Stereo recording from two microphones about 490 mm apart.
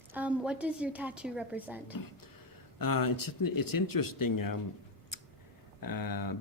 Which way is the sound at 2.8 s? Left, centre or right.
Left.